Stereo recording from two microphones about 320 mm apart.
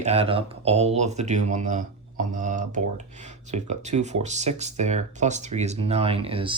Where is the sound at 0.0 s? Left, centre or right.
Centre.